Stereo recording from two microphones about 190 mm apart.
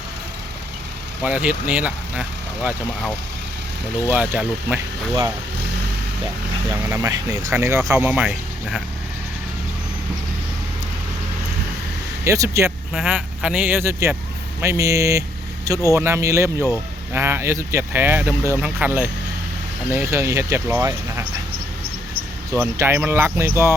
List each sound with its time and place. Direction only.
1.2 s speech: 5° right (ahead or behind)
6.7 s speech: 15° right (ahead or behind)
12.2 s speech: 15° right (ahead or behind)
12.9 s speech: 5° right (ahead or behind)
22.5 s speech: 15° right (ahead or behind)